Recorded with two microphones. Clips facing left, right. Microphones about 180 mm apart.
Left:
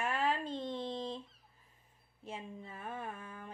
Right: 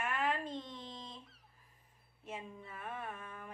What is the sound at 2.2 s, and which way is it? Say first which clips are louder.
Speech: left 1 dB; 30° left (ahead or behind).